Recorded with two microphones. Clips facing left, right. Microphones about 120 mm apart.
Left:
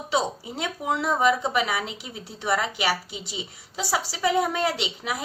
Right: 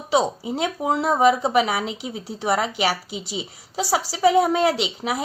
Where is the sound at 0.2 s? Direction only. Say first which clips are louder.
Right 6 dB; 40° right (ahead or behind).